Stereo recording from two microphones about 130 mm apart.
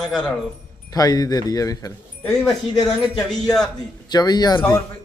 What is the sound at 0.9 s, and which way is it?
Speech, 30° left (ahead or behind).